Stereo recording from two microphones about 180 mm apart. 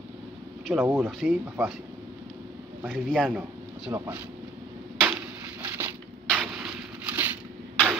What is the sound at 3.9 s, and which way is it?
Speech, 15° right (ahead or behind).